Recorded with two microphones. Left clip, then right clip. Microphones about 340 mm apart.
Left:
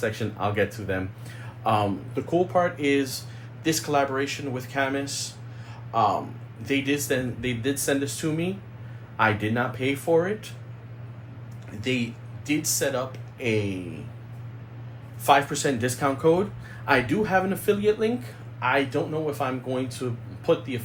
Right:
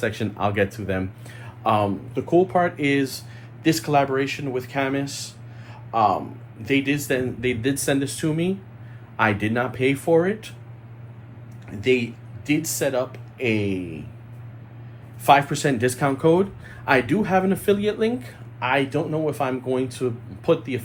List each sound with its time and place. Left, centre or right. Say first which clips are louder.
0.0 s speech: right 3 dB; right
11.8 s speech: right 7 dB; right
15.2 s speech: right 3 dB; right